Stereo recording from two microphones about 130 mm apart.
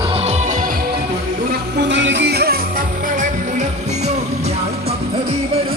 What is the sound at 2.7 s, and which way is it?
Music, 85° right.